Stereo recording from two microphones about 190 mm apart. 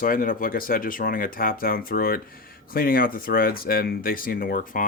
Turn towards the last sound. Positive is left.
turn(degrees=45)  # may be behind; listen again after turning